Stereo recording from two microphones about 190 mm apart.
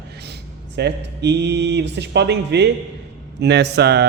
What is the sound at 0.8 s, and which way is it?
Speech, 65° right (ahead or behind).